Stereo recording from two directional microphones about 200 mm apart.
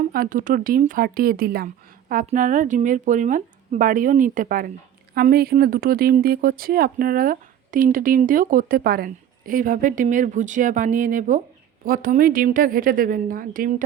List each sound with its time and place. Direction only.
0.0 s speech: 45° right (ahead or behind)